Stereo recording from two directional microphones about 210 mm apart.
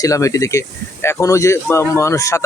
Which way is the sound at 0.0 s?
15° left (ahead or behind).